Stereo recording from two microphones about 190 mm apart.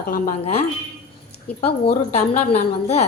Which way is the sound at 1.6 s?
30° left (ahead or behind).